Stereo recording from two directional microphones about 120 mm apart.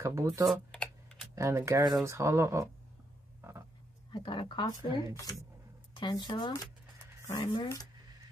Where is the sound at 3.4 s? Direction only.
20° right (ahead or behind).